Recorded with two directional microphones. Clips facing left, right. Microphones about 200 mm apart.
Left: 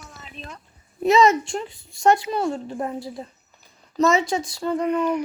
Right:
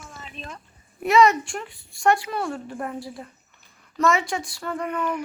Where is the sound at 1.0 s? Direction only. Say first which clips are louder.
Left 1 dB; 25° left (ahead or behind).